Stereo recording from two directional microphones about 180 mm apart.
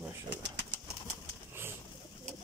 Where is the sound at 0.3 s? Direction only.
80° right.